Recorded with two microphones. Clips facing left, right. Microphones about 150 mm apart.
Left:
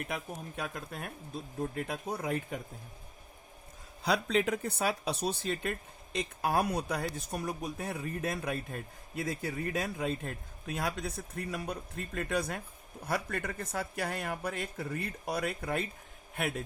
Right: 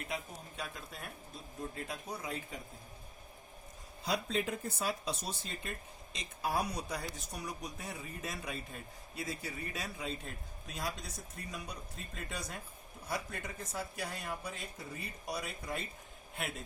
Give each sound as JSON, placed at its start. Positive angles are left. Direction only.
{"t": 0.0, "sound": "speech", "side_deg": 60}
{"t": 4.0, "sound": "speech", "side_deg": 80}